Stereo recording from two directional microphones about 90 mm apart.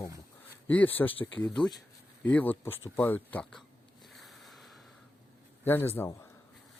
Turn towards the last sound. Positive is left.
turn(degrees=25)  # may be behind; listen again after turning